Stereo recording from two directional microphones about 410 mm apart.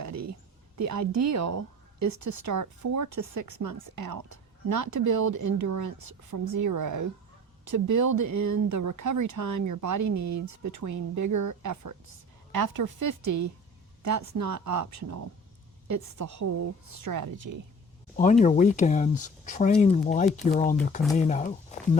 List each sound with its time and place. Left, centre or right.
0.0 s speech: right
18.2 s speech: centre